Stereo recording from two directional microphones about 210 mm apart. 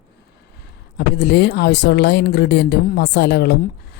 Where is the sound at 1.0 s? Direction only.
50° left (ahead or behind).